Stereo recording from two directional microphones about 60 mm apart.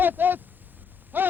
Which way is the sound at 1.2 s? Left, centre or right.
Right.